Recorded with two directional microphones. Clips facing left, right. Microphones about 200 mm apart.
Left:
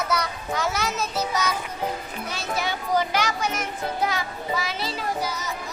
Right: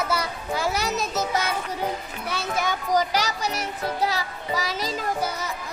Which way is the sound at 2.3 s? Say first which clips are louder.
Right 2 dB; 50° right (ahead or behind).